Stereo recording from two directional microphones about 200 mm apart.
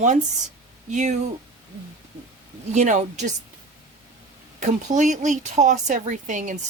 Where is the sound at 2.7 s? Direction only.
35° right (ahead or behind).